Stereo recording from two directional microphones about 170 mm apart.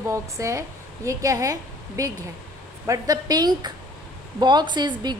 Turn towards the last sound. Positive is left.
turn(degrees=-25)  # may be behind; listen again after turning